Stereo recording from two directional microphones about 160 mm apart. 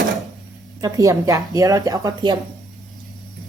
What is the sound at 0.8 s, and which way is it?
A woman's voice, 20° right (ahead or behind).